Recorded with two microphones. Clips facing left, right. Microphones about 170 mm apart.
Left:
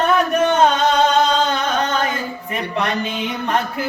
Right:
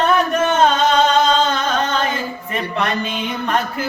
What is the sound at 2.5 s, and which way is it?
Music, 20° left (ahead or behind).